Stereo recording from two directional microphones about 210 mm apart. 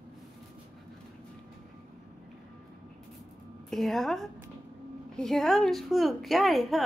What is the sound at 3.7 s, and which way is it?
A woman's voice, centre (ahead or behind).